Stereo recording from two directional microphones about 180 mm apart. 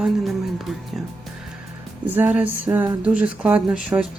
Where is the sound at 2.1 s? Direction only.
10° right (ahead or behind).